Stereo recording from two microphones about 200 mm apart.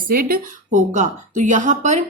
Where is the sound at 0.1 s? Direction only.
45° right (ahead or behind).